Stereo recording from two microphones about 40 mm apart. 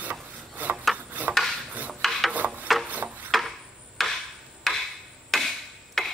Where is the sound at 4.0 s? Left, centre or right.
Centre.